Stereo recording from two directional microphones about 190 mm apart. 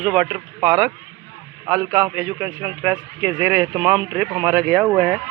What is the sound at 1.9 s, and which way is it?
Speech, 5° right (ahead or behind).